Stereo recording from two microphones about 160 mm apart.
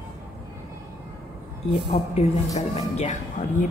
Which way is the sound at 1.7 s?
30° left (ahead or behind).